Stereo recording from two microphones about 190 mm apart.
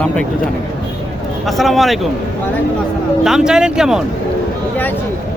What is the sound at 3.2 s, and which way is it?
Speech, 5° right (ahead or behind).